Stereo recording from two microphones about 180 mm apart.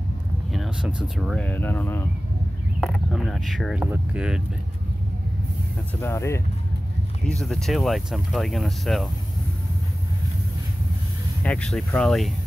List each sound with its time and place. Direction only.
0.5 s speech: 5° right (ahead or behind); by 2.0 s 10° left (ahead or behind)
2.8 s speech: centre (ahead or behind)
5.9 s speech: 15° left (ahead or behind)
7.2 s speech: centre (ahead or behind)
11.4 s speech: 5° left (ahead or behind)